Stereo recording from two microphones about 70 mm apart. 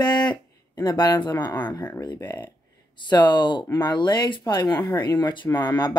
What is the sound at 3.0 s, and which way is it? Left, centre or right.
Speech, left.